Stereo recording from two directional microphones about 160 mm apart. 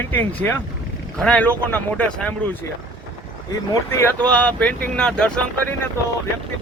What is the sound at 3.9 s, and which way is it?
Speech, 10° left (ahead or behind).